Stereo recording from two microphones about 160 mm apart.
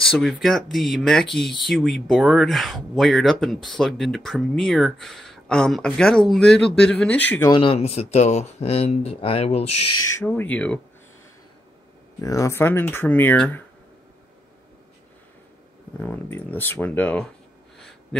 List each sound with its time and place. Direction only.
0.1 s speech: centre (ahead or behind)
7.4 s speech: 30° left (ahead or behind)
10.1 s speech: 10° left (ahead or behind)
12.2 s speech: 20° left (ahead or behind)
16.0 s speech: 15° left (ahead or behind)